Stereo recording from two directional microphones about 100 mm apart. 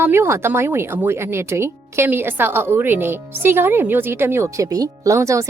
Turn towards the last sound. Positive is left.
turn(degrees=-30)  # may be behind; listen again after turning